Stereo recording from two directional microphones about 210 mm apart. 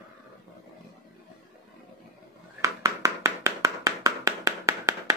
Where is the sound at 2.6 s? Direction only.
15° right (ahead or behind).